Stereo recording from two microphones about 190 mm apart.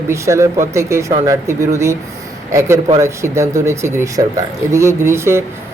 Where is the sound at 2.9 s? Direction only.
15° right (ahead or behind).